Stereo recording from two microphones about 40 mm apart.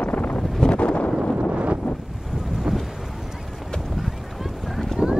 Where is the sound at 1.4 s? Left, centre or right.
Right.